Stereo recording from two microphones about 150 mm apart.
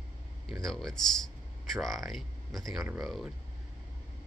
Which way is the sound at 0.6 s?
5° left (ahead or behind).